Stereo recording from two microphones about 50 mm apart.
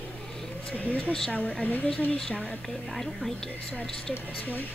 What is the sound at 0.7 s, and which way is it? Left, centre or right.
Speech, left.